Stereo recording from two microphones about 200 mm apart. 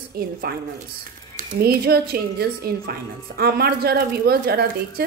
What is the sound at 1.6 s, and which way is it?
A woman's voice, 50° right (ahead or behind).